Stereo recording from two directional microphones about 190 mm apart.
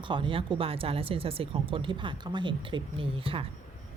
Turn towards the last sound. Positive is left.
turn(degrees=-30)  # may be behind; listen again after turning